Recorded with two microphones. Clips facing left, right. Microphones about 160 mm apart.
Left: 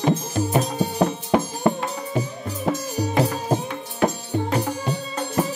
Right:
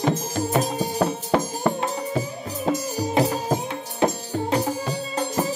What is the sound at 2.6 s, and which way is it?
Music, 20° right (ahead or behind).